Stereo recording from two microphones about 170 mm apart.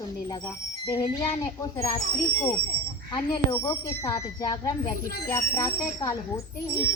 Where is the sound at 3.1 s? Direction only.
25° left (ahead or behind).